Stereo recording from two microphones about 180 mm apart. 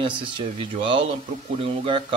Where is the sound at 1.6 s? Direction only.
30° right (ahead or behind).